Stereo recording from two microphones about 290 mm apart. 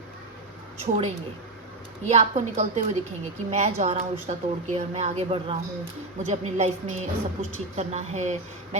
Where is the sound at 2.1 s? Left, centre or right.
Right.